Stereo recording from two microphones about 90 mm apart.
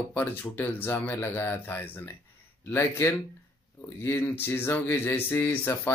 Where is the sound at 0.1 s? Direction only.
20° left (ahead or behind).